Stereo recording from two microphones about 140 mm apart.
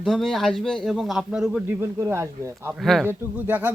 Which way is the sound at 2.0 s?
20° right (ahead or behind).